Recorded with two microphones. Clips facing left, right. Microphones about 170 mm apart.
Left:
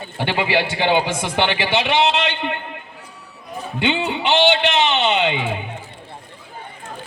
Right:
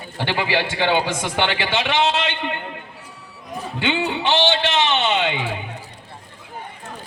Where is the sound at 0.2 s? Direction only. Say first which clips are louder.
Left 2 dB; 15° left (ahead or behind).